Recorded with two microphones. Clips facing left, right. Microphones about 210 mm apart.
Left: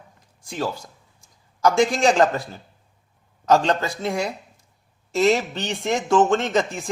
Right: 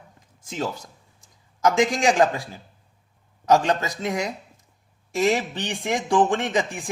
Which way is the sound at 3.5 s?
15° right (ahead or behind).